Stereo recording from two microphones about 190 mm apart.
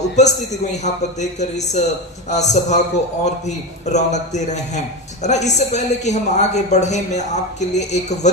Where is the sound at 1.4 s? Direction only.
35° left (ahead or behind).